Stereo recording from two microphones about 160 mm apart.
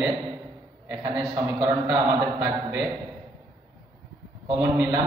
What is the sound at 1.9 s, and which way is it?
Speech, 15° right (ahead or behind).